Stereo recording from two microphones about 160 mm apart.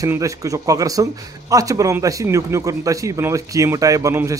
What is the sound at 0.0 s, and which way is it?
A man's voice, 20° right (ahead or behind).